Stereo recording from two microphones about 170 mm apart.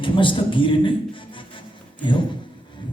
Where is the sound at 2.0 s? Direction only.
30° left (ahead or behind).